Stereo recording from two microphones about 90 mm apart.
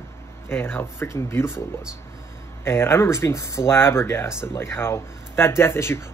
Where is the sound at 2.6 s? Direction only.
30° left (ahead or behind).